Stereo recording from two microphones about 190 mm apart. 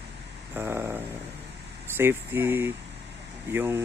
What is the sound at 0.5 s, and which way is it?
Speech, 10° right (ahead or behind).